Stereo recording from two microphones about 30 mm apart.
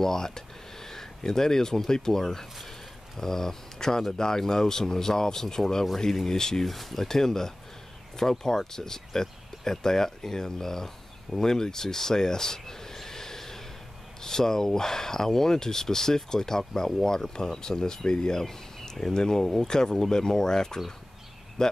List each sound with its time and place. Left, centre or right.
0.0 s a sound: centre
1.9 s speech: centre
6.6 s speech: centre
7.0 s speech: centre
18.4 s speech: centre